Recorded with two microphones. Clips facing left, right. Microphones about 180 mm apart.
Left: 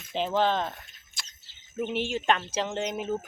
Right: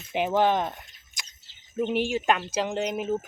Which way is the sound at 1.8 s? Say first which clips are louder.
Right 4 dB; 15° right (ahead or behind).